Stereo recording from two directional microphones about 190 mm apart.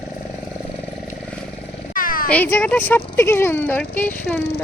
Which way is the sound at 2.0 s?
50° left (ahead or behind).